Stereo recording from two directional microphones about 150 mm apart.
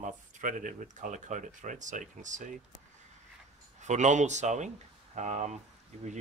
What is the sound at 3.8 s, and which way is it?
Speech, 50° right (ahead or behind).